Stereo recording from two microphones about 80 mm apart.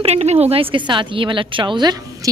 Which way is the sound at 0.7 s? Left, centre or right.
Right.